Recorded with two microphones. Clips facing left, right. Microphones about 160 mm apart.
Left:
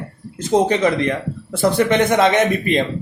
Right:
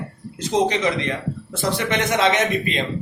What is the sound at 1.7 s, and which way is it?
A man's voice, 55° left (ahead or behind).